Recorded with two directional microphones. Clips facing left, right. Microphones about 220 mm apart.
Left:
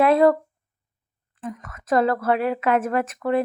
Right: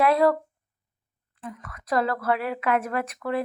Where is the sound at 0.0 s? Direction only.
25° left (ahead or behind).